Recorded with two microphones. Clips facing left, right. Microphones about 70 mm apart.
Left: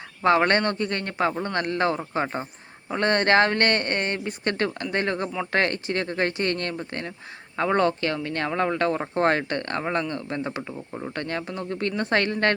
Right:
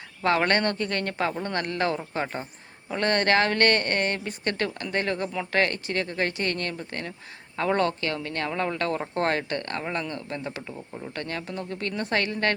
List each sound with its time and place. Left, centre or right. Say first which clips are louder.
0.2 s speech: left 3 dB; left